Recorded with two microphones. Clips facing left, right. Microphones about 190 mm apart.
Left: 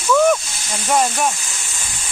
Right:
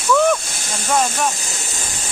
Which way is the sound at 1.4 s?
40° right (ahead or behind).